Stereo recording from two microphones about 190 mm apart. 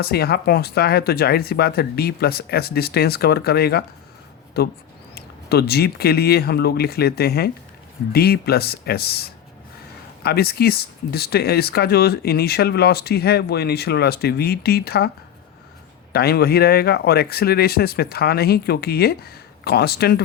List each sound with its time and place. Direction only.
0.0 s speech: 55° left (ahead or behind)
16.1 s speech: 55° left (ahead or behind)